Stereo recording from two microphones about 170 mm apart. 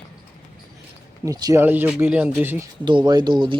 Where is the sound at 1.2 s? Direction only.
20° right (ahead or behind).